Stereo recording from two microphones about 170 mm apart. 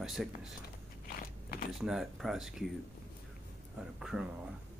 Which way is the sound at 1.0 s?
60° left (ahead or behind).